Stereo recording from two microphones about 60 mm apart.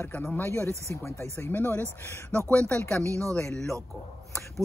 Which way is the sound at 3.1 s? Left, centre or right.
Right.